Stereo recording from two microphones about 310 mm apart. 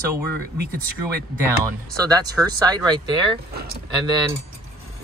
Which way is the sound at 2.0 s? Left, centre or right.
Centre.